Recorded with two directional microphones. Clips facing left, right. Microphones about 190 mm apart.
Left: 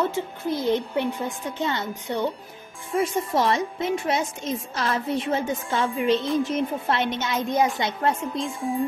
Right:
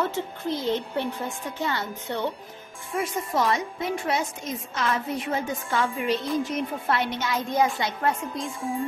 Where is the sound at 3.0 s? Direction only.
30° left (ahead or behind).